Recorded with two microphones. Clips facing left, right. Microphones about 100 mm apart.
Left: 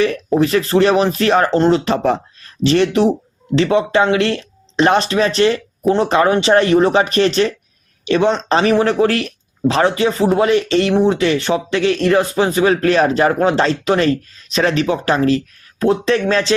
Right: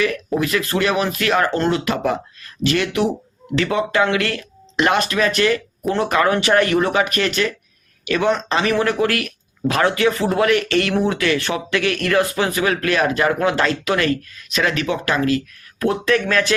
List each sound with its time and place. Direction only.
0.0 s speech: 30° left (ahead or behind)